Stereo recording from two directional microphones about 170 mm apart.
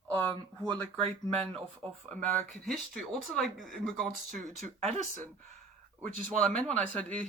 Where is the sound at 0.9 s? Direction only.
35° right (ahead or behind).